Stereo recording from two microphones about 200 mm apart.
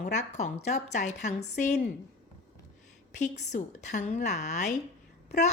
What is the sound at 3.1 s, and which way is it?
A woman's voice, 35° left (ahead or behind).